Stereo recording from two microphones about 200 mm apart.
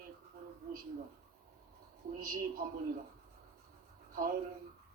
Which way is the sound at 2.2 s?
45° right (ahead or behind).